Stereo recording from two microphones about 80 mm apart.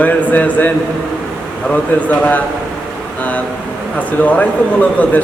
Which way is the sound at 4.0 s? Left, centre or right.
Centre.